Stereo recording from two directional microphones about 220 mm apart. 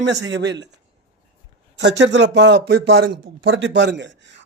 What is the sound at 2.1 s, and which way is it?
A man's voice, 55° right (ahead or behind).